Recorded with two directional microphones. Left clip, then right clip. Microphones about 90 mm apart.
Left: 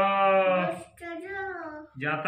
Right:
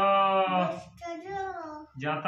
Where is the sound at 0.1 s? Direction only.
25° right (ahead or behind).